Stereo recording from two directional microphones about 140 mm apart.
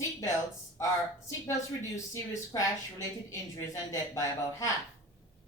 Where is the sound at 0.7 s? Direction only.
20° left (ahead or behind).